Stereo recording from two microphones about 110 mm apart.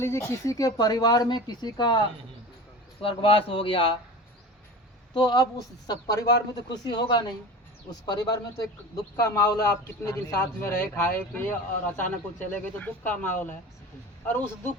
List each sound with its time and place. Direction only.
0.0 s a man's voice: 25° left (ahead or behind); by 2.0 s 40° left (ahead or behind)
3.0 s speech: 55° left (ahead or behind)
5.1 s a man's voice: 40° left (ahead or behind); by 14.7 s 15° left (ahead or behind)